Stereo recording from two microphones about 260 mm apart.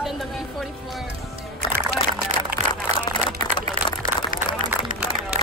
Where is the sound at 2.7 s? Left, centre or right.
Centre.